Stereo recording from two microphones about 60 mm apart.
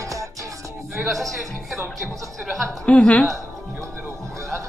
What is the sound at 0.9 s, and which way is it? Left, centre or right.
Speech, centre.